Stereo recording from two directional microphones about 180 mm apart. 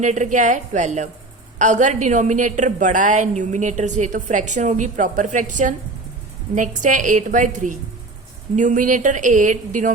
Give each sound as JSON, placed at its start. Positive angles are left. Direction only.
{"t": 0.0, "sound": "a woman's voice", "side_deg": -45}